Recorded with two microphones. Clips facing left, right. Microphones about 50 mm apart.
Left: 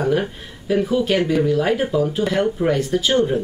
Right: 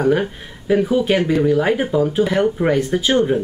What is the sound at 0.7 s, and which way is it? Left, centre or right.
Speech, centre.